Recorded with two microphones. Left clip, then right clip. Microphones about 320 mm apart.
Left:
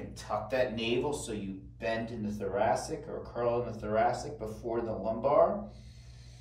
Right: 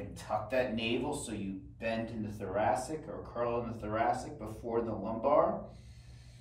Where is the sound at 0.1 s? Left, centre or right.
Centre.